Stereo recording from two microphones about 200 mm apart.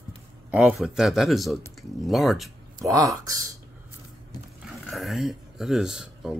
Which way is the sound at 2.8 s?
15° right (ahead or behind).